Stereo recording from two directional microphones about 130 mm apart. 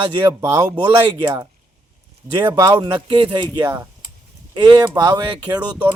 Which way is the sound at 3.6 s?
20° right (ahead or behind).